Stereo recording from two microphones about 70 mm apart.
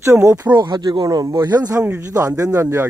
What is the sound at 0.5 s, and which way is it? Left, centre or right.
Speech, right.